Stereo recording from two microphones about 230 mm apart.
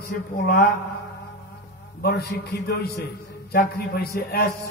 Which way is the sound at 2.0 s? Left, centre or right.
Left.